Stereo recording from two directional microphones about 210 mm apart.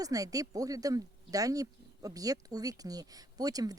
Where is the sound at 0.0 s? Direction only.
15° right (ahead or behind).